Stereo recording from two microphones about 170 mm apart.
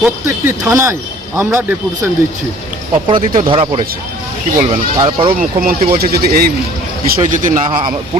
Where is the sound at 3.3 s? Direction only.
30° right (ahead or behind).